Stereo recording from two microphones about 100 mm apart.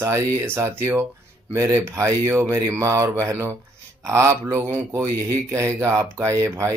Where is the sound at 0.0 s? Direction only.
30° right (ahead or behind).